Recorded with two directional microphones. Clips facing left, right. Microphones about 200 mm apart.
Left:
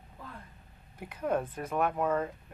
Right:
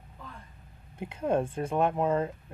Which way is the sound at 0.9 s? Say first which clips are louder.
Right 3 dB; 25° right (ahead or behind).